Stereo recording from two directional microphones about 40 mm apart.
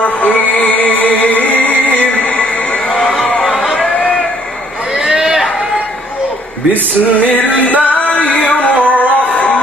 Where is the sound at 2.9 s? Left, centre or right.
Centre.